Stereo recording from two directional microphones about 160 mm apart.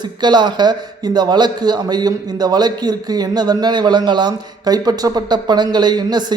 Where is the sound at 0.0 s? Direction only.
30° right (ahead or behind).